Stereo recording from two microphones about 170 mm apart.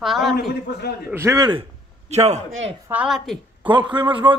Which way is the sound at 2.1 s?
40° right (ahead or behind).